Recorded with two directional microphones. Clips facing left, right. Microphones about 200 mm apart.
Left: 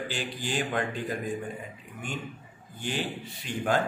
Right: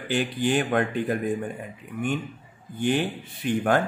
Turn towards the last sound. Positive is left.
turn(degrees=-55)  # may be behind; listen again after turning